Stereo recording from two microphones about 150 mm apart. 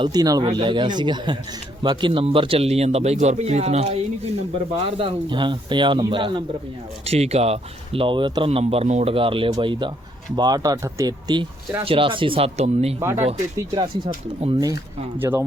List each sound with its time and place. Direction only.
0.0 s speech: 25° right (ahead or behind)
7.0 s speech: 45° right (ahead or behind)
13.0 s speech: 15° right (ahead or behind)
13.7 s speech: 30° right (ahead or behind)
15.2 s speech: 15° right (ahead or behind)